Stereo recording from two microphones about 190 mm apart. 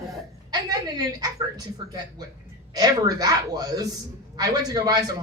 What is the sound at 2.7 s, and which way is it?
A man's voice, 20° right (ahead or behind).